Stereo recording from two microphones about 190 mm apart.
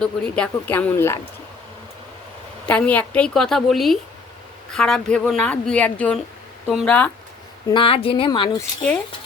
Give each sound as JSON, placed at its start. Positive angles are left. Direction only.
{"t": 0.0, "sound": "speech", "side_deg": 5}
{"t": 2.6, "sound": "a woman's voice", "side_deg": 5}
{"t": 7.7, "sound": "a woman's voice", "side_deg": 25}